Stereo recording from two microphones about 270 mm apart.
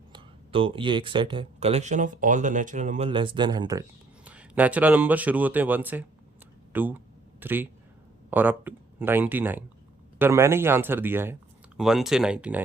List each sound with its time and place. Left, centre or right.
0.1 s speech: centre
6.7 s a sound: centre
8.3 s speech: centre